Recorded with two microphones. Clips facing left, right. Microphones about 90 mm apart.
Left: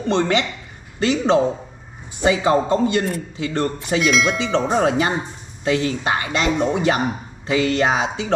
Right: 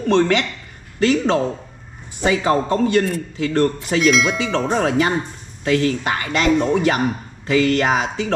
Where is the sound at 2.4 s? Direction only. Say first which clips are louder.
Right 1 dB; 10° left (ahead or behind).